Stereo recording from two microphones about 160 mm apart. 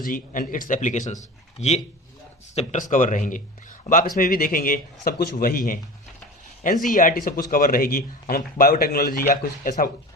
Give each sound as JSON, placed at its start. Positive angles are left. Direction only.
{"t": 0.0, "sound": "speech", "side_deg": 60}
{"t": 6.8, "sound": "speech", "side_deg": 55}
{"t": 9.3, "sound": "speech", "side_deg": 55}